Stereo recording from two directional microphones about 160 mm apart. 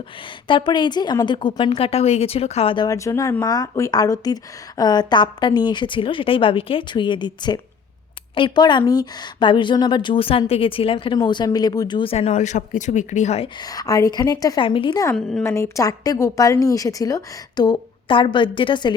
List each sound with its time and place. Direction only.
0.4 s a woman's voice: 30° left (ahead or behind)
13.6 s a woman's voice: 25° left (ahead or behind)
15.1 s a woman's voice: 5° left (ahead or behind)
15.4 s a woman's voice: 15° left (ahead or behind)